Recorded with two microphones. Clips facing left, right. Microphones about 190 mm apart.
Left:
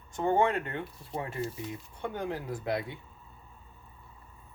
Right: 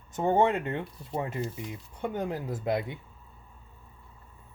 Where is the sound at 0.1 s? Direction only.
20° right (ahead or behind).